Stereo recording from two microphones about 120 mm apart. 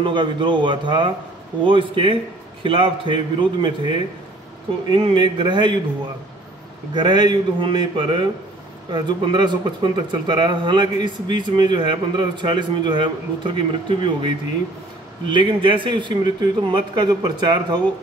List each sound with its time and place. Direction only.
0.0 s a man's voice: 40° right (ahead or behind)
6.9 s speech: 40° right (ahead or behind)